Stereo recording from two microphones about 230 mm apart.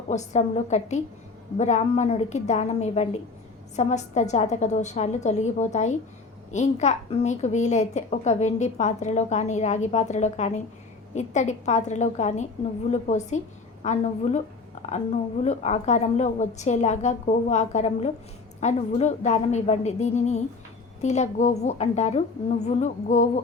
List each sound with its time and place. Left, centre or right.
0.1 s a woman's voice: left